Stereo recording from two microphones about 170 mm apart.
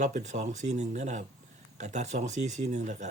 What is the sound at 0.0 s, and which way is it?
Speech, 45° right (ahead or behind).